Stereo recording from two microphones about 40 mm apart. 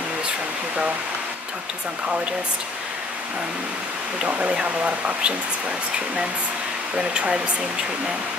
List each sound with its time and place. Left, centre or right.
4.3 s speech: right
7.0 s speech: right